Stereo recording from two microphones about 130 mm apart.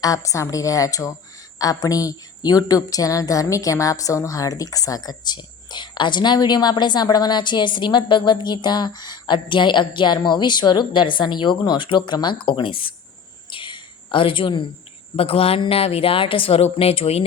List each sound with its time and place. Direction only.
0.0 s a woman's voice: 25° left (ahead or behind)
13.5 s a sound: 40° left (ahead or behind)
15.1 s speech: 50° left (ahead or behind)